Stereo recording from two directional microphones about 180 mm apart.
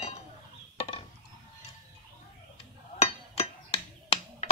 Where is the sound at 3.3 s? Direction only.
35° left (ahead or behind).